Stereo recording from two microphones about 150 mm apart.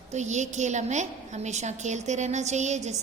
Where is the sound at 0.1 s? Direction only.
50° right (ahead or behind).